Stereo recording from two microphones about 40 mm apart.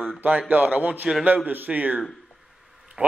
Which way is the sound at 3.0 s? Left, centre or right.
Right.